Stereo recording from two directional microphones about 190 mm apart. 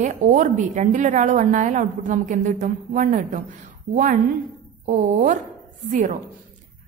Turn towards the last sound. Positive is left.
turn(degrees=-40)  # may be behind; listen again after turning